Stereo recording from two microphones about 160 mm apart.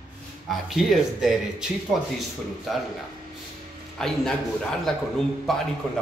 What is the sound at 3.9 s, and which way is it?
A man's voice, 5° left (ahead or behind).